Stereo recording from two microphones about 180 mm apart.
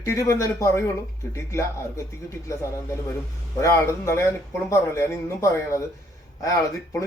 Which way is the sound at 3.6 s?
15° left (ahead or behind).